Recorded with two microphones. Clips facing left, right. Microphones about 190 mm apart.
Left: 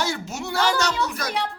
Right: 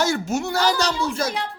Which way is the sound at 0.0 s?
50° right (ahead or behind).